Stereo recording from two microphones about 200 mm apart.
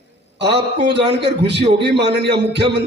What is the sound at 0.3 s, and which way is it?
Speech, 55° right (ahead or behind).